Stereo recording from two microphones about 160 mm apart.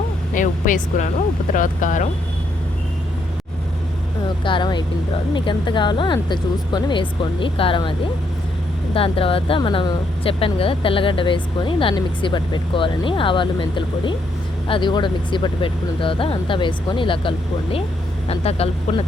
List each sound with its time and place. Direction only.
0.3 s speech: 55° left (ahead or behind)
4.4 s speech: 30° left (ahead or behind)
9.0 s speech: 35° left (ahead or behind)